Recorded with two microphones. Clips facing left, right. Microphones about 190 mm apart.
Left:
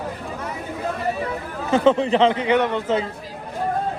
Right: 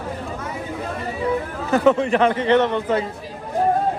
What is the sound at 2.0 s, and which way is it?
Speech, 35° left (ahead or behind).